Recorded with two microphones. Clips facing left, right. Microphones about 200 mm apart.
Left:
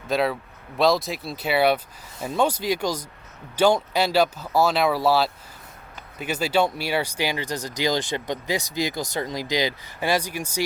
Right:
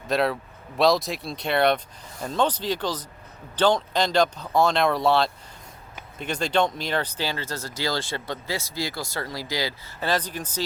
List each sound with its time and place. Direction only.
0.1 s speech: centre (ahead or behind)